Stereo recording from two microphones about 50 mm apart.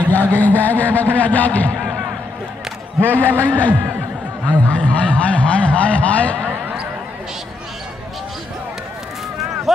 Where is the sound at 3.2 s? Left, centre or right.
Right.